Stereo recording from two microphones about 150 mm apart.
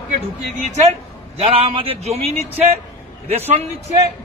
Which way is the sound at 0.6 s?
50° right (ahead or behind).